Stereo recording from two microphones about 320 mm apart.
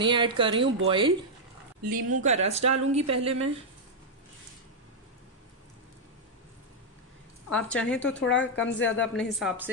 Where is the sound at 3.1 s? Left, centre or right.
Centre.